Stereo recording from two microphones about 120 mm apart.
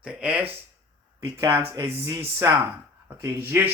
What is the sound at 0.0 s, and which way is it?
Speech, 10° right (ahead or behind).